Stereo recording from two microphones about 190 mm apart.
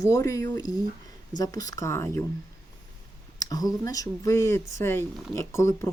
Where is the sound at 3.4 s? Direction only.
20° left (ahead or behind).